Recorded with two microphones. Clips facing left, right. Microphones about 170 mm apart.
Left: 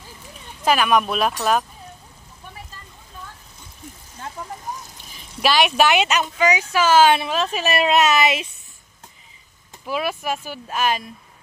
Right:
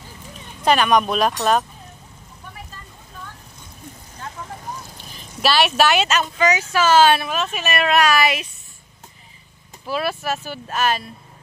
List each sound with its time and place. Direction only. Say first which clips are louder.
0.7 s speech: right 1 dB; 5° left (ahead or behind)
5.4 s speech: even; 15° left (ahead or behind)
7.2 s speech: left 2 dB; 30° left (ahead or behind)
7.8 s speech: even; 20° left (ahead or behind)
9.8 s speech: right 1 dB; 15° left (ahead or behind)